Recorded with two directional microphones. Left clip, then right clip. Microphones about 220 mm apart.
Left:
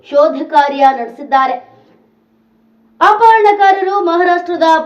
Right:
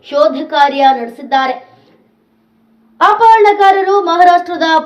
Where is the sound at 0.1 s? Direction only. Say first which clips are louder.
Left 1 dB; 45° right (ahead or behind).